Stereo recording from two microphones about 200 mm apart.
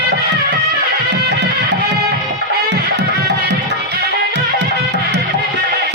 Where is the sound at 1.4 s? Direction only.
60° right (ahead or behind).